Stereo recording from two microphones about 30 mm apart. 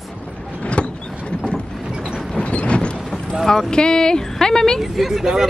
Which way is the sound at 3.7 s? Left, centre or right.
Left.